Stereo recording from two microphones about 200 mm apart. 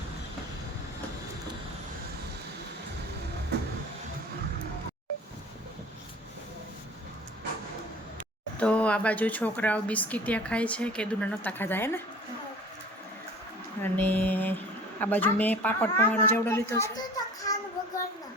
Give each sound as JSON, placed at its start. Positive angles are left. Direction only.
{"t": 3.5, "sound": "music", "side_deg": -55}
{"t": 8.5, "sound": "speech", "side_deg": 5}
{"t": 13.8, "sound": "a child's voice", "side_deg": 10}